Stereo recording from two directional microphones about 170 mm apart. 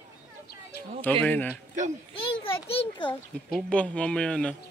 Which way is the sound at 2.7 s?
30° left (ahead or behind).